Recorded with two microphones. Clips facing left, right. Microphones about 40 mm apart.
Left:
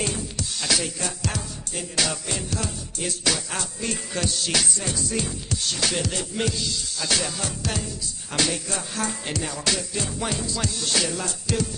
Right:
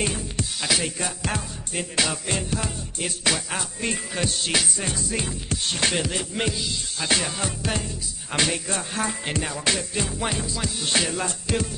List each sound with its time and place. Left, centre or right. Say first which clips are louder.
0.0 s music: right 1 dB; right
2.0 s music: right 1 dB; right
5.9 s music: right 1 dB; right
10.9 s music: right 3 dB; right